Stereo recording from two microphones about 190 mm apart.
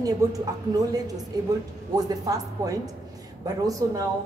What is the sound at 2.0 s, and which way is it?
A woman's voice, 20° right (ahead or behind).